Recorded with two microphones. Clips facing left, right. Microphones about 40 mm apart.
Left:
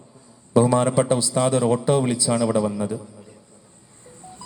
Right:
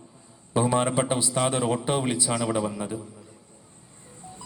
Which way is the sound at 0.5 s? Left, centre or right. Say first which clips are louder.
Left 5 dB; right.